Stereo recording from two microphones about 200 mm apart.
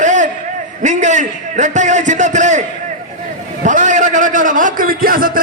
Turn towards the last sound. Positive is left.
turn(degrees=-45)  # may be behind; listen again after turning